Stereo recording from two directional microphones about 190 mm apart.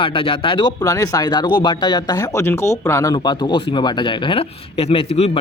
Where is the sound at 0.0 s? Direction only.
30° left (ahead or behind).